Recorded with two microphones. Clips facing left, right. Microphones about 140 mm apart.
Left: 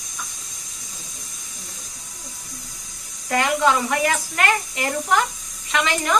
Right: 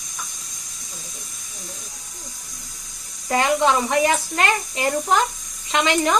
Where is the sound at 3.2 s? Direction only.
30° right (ahead or behind).